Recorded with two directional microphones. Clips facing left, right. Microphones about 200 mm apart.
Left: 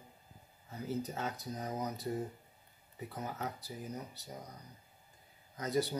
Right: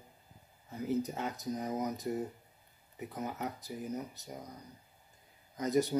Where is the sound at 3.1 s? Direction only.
15° right (ahead or behind).